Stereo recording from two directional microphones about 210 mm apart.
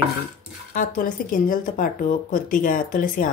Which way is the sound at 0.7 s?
40° left (ahead or behind).